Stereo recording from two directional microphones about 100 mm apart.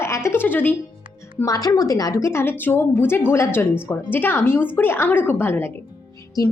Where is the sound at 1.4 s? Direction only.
35° left (ahead or behind).